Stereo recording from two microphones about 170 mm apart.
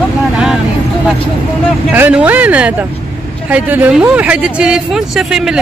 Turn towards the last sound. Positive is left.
turn(degrees=-5)  # may be behind; listen again after turning